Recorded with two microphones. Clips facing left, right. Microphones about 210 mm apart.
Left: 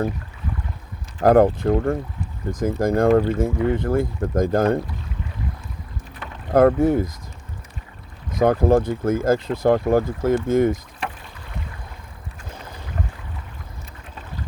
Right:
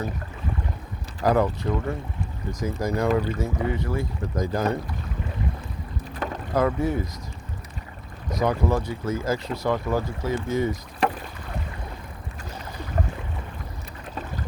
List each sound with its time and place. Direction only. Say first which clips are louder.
1.2 s speech: left 7 dB; 50° left (ahead or behind)
6.5 s speech: left 8 dB; 55° left (ahead or behind)
8.4 s speech: left 7 dB; 50° left (ahead or behind)
11.0 s rowboat: right 7 dB; 40° right (ahead or behind)